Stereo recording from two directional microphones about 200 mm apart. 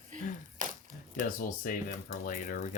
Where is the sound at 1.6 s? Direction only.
45° left (ahead or behind).